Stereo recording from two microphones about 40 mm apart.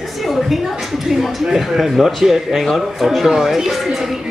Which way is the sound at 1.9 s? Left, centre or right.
Centre.